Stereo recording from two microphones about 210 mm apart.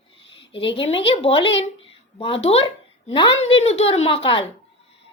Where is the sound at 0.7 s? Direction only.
25° left (ahead or behind).